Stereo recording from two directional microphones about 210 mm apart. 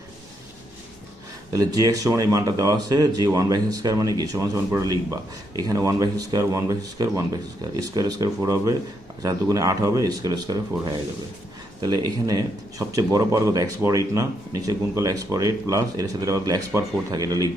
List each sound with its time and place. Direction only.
1.5 s speech: 15° right (ahead or behind)